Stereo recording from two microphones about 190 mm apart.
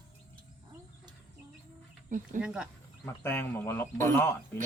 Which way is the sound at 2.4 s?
5° right (ahead or behind).